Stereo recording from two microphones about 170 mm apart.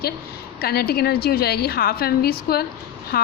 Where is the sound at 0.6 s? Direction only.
65° left (ahead or behind).